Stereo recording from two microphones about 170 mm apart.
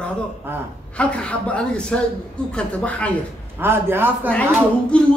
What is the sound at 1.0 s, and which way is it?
Speech, 5° left (ahead or behind).